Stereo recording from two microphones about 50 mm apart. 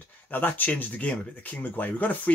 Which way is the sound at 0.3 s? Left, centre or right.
Left.